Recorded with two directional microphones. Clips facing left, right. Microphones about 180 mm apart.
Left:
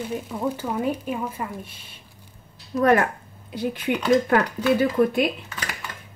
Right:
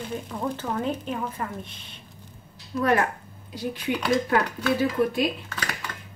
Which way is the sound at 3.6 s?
55° left (ahead or behind).